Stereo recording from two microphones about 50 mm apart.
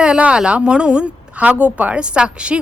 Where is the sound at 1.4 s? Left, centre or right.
Right.